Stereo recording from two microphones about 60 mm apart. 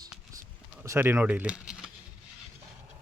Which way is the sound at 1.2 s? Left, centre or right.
Right.